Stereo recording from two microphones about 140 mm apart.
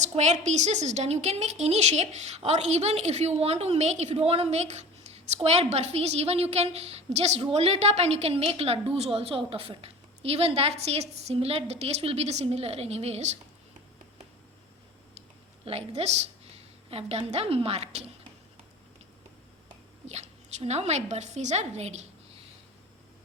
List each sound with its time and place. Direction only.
0.0 s a woman's voice: 55° right (ahead or behind)
15.6 s a woman's voice: 45° right (ahead or behind)
20.1 s a woman's voice: 50° right (ahead or behind)